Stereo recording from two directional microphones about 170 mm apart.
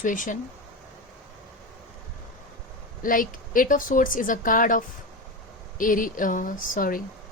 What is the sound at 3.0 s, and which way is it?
Speech, 50° left (ahead or behind).